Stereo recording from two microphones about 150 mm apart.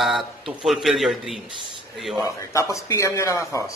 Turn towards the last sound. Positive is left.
turn(degrees=20)  # may be behind; listen again after turning